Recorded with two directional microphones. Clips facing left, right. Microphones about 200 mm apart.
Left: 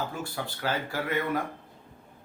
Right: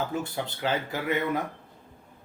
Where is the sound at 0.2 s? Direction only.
20° right (ahead or behind).